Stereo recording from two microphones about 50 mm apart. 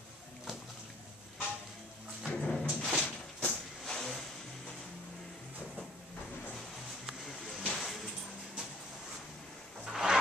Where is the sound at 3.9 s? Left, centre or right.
Centre.